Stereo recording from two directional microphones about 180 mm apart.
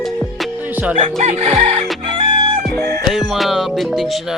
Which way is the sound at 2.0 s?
30° right (ahead or behind).